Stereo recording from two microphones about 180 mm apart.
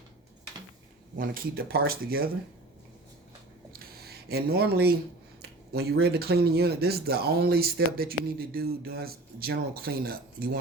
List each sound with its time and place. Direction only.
1.1 s speech: 50° right (ahead or behind)
3.7 s a sound: 60° right (ahead or behind)
5.4 s speech: 60° right (ahead or behind)